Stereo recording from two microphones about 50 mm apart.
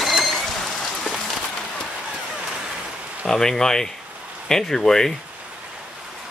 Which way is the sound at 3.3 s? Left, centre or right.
Centre.